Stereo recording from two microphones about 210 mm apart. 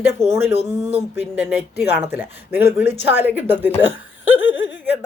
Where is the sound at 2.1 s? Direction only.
55° left (ahead or behind).